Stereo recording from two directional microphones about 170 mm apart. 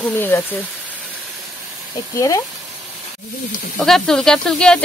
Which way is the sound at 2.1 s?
20° left (ahead or behind).